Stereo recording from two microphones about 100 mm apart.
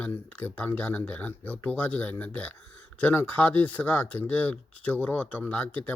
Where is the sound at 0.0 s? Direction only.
15° left (ahead or behind).